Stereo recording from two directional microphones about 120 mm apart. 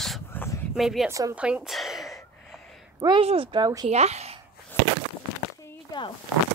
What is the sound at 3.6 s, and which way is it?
Speech, 35° right (ahead or behind).